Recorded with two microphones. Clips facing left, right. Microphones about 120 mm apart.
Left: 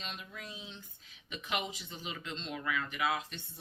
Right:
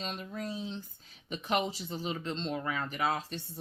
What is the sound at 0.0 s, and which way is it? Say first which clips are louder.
Speech: right 8 dB; 40° right (ahead or behind).